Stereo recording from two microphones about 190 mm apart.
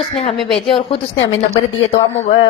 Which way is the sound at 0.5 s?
30° left (ahead or behind).